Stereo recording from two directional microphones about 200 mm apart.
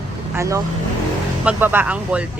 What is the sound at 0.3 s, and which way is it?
Speech, 15° right (ahead or behind).